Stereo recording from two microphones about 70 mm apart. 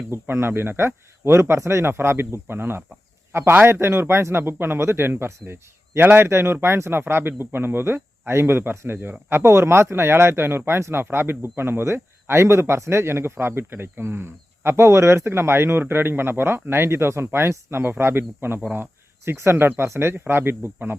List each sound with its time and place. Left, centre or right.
0.1 s speech: right